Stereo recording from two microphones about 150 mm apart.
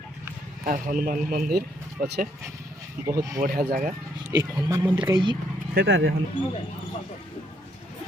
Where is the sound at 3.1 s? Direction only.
20° right (ahead or behind).